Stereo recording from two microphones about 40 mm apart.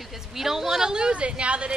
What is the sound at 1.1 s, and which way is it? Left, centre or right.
Speech, right.